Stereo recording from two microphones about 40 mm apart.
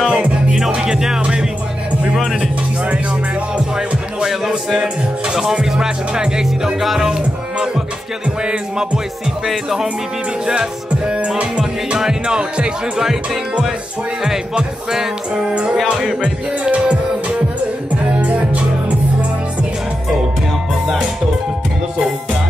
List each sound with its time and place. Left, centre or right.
0.0 s music: right
3.7 s music: centre
11.1 s speech: right
13.0 s music: centre
14.9 s music: centre
16.2 s music: right